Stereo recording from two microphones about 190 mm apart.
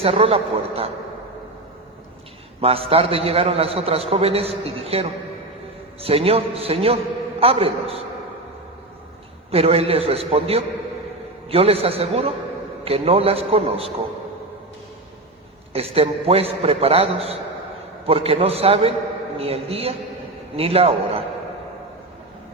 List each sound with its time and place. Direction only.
0.0 s a man's voice: 30° right (ahead or behind)
2.6 s a man's voice: 30° right (ahead or behind)
9.5 s a man's voice: 30° right (ahead or behind)
15.7 s a man's voice: 30° right (ahead or behind)